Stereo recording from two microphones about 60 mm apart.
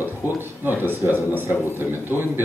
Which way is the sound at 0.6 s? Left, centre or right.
Right.